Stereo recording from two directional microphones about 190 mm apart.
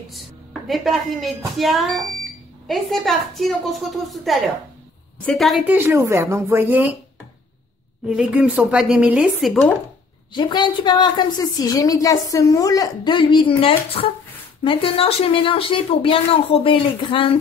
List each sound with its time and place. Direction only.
0.1 s a woman's voice: centre (ahead or behind)
5.8 s speech: 15° right (ahead or behind)
8.1 s a woman's voice: 5° right (ahead or behind)
10.3 s a woman's voice: 25° left (ahead or behind)